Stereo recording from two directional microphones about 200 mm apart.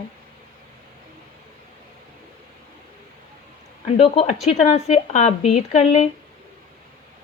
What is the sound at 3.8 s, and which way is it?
Speech, 35° left (ahead or behind).